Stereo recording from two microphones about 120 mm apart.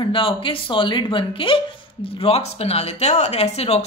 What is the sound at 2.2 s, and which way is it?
Speech, 55° left (ahead or behind).